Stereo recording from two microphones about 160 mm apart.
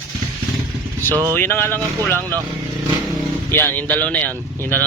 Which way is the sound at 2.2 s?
20° right (ahead or behind).